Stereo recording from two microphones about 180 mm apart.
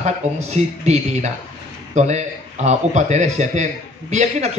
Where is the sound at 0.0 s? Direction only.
40° right (ahead or behind).